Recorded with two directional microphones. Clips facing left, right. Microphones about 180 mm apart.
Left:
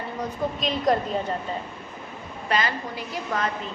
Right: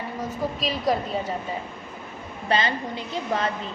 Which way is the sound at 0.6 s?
5° right (ahead or behind).